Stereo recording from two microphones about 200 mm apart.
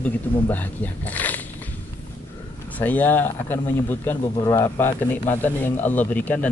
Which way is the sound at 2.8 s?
10° left (ahead or behind).